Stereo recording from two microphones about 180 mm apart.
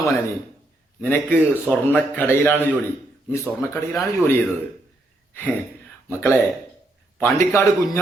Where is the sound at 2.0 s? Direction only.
10° left (ahead or behind).